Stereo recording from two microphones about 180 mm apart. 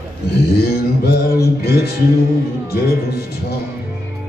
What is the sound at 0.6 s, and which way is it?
Music, 60° left (ahead or behind).